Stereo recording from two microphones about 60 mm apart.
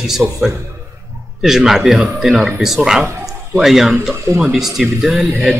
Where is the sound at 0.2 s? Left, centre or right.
Centre.